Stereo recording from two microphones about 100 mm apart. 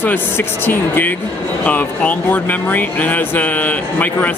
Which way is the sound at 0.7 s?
20° left (ahead or behind).